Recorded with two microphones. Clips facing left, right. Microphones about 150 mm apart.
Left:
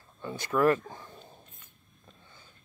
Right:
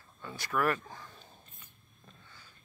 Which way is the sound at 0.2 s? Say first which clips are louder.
Left 6 dB; 20° left (ahead or behind).